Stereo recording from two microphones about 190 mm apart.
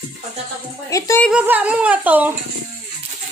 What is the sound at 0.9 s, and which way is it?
Speech, 15° left (ahead or behind).